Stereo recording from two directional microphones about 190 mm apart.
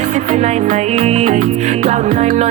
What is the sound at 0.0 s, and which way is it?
Music, 40° right (ahead or behind).